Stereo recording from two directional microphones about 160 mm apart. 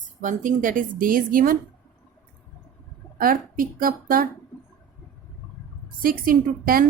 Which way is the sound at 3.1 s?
60° right (ahead or behind).